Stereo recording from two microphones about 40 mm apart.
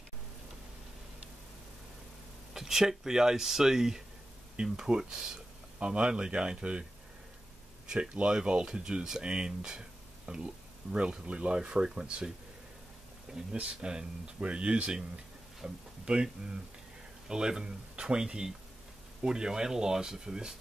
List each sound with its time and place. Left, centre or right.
2.5 s speech: centre
5.8 s speech: right
13.5 s speech: right
17.3 s speech: centre